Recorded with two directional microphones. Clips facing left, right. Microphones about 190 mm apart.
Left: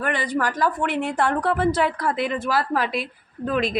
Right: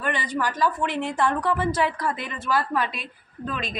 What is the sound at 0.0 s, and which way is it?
A woman's voice, 60° left (ahead or behind).